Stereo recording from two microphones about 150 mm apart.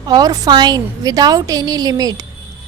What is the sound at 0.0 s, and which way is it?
A woman's voice, 25° right (ahead or behind).